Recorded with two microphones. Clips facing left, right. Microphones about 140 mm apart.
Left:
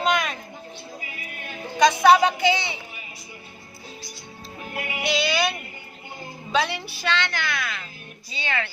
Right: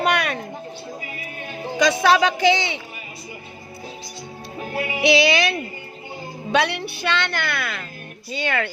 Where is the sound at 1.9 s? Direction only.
90° right.